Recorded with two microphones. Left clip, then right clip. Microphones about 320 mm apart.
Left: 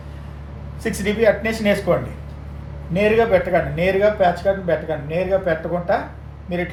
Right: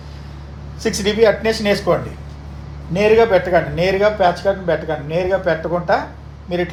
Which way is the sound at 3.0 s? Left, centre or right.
Right.